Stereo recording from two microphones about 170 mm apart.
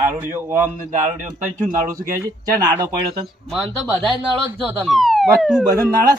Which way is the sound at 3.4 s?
Centre (ahead or behind).